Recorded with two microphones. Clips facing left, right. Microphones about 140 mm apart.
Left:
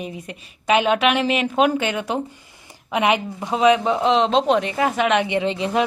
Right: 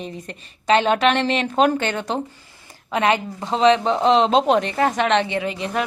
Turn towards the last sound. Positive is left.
turn(degrees=25)  # may be behind; listen again after turning